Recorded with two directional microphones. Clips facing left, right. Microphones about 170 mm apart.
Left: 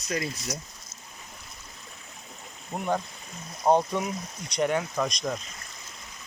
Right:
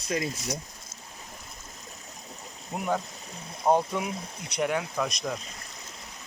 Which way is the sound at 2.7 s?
5° right (ahead or behind).